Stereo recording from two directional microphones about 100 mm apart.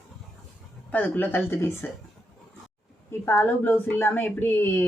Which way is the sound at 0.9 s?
20° left (ahead or behind).